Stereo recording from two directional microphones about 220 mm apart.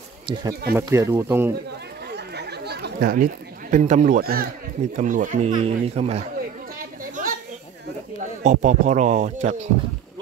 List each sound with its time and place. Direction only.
0.3 s speech: 20° right (ahead or behind)
2.1 s chatter: 50° right (ahead or behind)
3.7 s speech: 35° right (ahead or behind)
7.0 s children playing: 40° right (ahead or behind)
8.2 s speech: 35° right (ahead or behind)